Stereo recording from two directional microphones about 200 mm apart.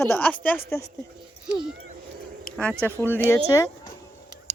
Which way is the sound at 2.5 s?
45° left (ahead or behind).